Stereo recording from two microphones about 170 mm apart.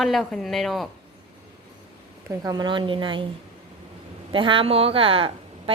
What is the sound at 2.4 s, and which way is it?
Speech, 25° right (ahead or behind).